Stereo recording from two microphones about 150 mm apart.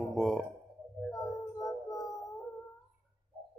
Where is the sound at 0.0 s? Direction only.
Centre (ahead or behind).